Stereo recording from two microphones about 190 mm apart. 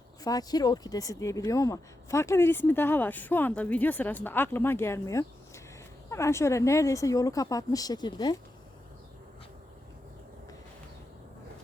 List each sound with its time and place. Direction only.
0.3 s speech: 20° left (ahead or behind)